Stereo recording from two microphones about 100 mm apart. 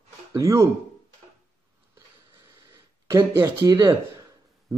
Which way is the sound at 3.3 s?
30° right (ahead or behind).